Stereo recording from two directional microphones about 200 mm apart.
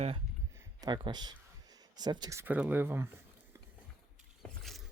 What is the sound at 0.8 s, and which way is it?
Speech, 20° right (ahead or behind).